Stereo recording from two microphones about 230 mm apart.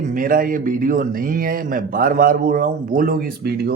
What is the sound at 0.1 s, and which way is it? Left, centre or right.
A man's voice, right.